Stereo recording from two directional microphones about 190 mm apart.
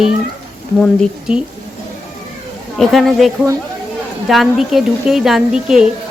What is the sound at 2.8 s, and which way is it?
A woman's voice, centre (ahead or behind).